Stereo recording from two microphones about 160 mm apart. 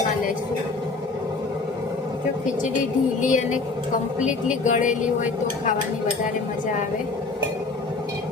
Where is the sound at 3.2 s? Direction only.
50° left (ahead or behind).